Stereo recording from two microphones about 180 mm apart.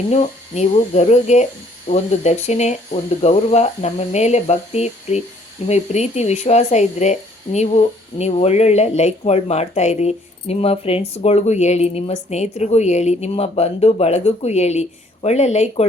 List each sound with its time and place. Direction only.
0.1 s speech: 40° left (ahead or behind)